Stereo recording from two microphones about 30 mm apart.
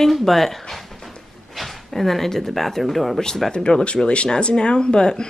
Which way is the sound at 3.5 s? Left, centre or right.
Left.